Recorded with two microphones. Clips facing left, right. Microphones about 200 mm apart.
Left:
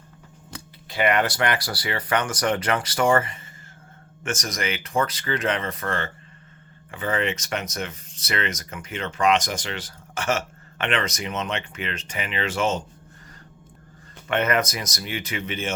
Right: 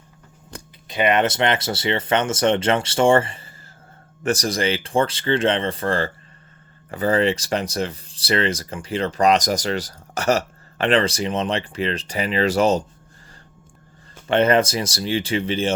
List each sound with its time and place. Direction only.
0.9 s speech: 20° right (ahead or behind); by 12.8 s 40° right (ahead or behind)
14.3 s speech: 30° right (ahead or behind)